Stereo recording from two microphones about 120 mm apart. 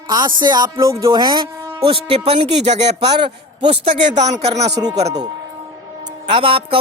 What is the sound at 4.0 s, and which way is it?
Speech, 85° right.